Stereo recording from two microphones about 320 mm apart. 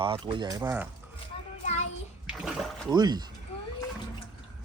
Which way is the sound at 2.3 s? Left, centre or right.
Centre.